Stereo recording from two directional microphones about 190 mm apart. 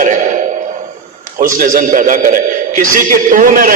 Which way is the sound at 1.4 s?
45° right (ahead or behind).